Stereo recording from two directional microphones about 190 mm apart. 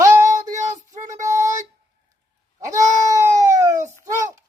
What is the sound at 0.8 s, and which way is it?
Child singing, 15° right (ahead or behind).